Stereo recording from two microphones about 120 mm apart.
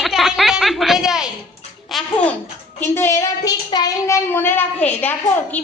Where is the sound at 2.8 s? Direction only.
20° left (ahead or behind).